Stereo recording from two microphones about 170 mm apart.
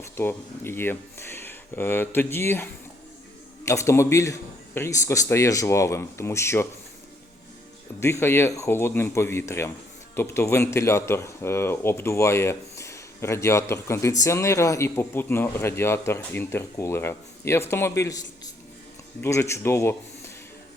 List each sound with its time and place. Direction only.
0.2 s speech: 15° left (ahead or behind)
3.7 s speech: 15° left (ahead or behind)
8.0 s speech: 15° left (ahead or behind)